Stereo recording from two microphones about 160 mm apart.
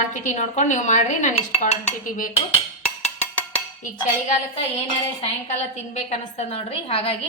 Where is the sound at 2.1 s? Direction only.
55° left (ahead or behind).